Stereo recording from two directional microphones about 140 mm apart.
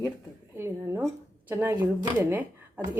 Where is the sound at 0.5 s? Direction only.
20° right (ahead or behind).